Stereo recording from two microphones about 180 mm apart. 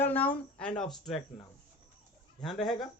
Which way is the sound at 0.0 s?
10° left (ahead or behind).